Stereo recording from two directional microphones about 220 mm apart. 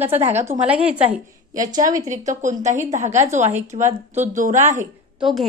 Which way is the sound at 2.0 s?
35° right (ahead or behind).